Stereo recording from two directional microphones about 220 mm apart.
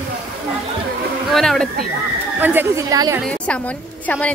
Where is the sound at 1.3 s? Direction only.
Centre (ahead or behind); by 3.2 s 15° right (ahead or behind).